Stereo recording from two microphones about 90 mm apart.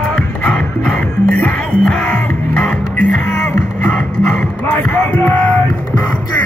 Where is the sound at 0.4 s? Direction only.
10° left (ahead or behind).